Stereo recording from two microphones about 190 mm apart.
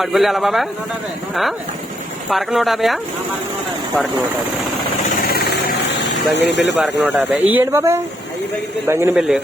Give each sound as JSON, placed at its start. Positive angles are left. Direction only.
{"t": 0.0, "sound": "a man's voice", "side_deg": 0}
{"t": 2.3, "sound": "a man's voice", "side_deg": 0}
{"t": 5.0, "sound": "vehicle", "side_deg": 55}
{"t": 7.0, "sound": "speech", "side_deg": -10}